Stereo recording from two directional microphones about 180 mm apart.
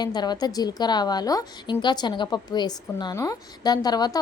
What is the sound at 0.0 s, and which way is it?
A woman's voice, 25° left (ahead or behind).